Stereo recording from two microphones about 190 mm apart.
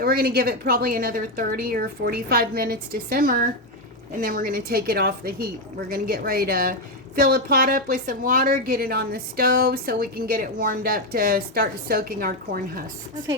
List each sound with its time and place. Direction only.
0.0 s a woman's voice: 55° right (ahead or behind)